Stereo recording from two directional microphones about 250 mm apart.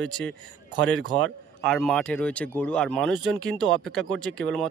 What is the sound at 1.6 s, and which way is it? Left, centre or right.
Speech, centre.